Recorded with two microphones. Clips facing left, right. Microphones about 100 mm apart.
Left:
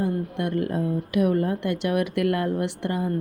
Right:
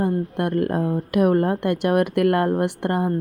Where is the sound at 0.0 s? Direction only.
50° right (ahead or behind).